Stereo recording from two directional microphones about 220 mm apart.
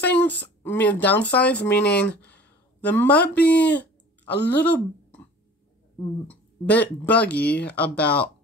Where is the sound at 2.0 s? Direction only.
5° left (ahead or behind).